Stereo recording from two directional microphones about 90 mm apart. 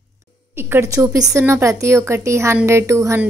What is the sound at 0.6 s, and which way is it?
Speech, 25° right (ahead or behind).